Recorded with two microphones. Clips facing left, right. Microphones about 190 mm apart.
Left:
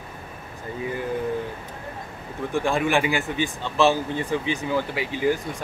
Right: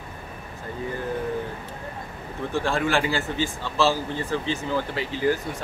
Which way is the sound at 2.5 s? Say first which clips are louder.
Left 2 dB; 15° left (ahead or behind).